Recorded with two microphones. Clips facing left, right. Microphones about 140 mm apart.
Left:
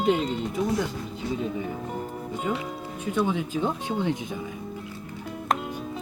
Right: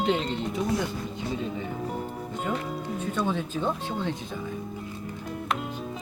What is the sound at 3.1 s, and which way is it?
Speech, 10° left (ahead or behind).